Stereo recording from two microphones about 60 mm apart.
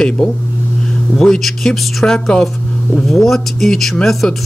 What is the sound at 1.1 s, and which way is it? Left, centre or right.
A man's voice, centre.